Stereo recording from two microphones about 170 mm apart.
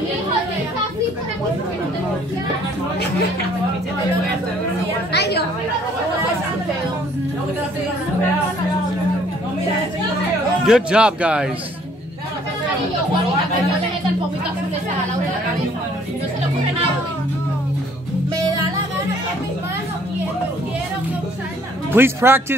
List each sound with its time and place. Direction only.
5.1 s a woman's voice: 75° left (ahead or behind)
10.6 s a man's voice: 5° right (ahead or behind)
21.9 s speech: 15° right (ahead or behind)